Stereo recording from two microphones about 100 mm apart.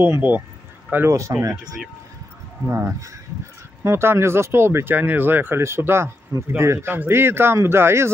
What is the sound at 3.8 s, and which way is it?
Speech, 25° right (ahead or behind).